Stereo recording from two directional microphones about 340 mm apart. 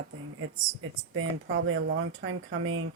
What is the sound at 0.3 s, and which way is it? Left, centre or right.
Speech, right.